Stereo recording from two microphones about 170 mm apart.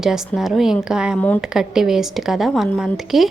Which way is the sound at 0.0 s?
5° right (ahead or behind).